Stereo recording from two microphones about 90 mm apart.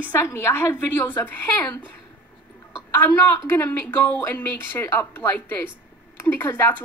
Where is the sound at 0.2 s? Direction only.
30° left (ahead or behind).